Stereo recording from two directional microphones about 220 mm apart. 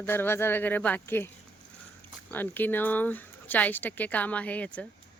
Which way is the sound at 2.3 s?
10° left (ahead or behind).